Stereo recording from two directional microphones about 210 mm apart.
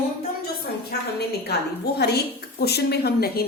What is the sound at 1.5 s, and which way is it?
Speech, 50° left (ahead or behind).